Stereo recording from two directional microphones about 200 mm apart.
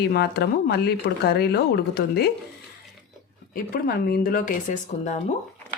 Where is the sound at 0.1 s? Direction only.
55° left (ahead or behind).